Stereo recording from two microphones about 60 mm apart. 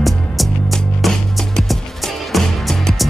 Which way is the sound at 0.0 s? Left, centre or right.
Centre.